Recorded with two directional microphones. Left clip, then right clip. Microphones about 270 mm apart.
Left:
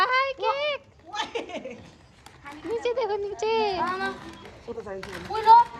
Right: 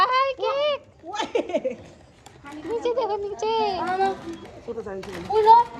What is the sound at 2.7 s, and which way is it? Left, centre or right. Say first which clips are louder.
Speech: right 2 dB; left.